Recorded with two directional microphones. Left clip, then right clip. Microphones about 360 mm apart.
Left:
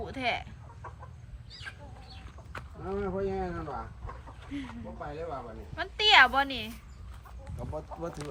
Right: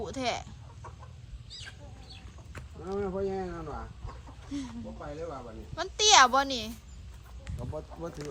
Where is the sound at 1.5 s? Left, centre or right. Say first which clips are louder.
Left 1 dB; centre.